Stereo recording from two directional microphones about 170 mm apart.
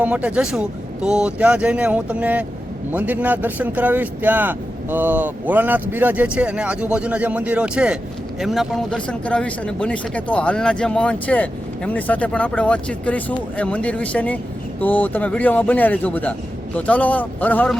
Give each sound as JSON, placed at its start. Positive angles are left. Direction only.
{"t": 0.0, "sound": "speech", "side_deg": -10}